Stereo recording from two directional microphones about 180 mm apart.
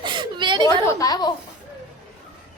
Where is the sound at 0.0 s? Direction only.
25° right (ahead or behind).